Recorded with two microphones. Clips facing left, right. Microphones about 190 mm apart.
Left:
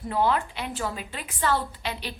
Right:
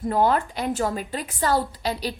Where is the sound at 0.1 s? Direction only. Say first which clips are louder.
Right 3 dB; 45° right (ahead or behind).